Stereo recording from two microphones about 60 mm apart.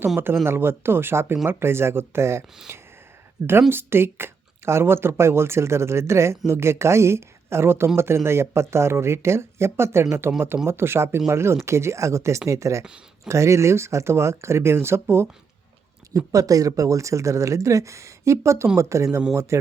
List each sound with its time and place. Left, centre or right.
0.4 s speech: right
16.1 s speech: right